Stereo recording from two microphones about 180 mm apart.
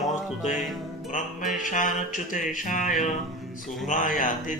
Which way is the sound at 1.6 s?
45° left (ahead or behind).